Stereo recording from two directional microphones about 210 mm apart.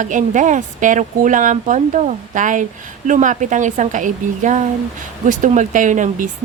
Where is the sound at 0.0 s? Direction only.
35° right (ahead or behind).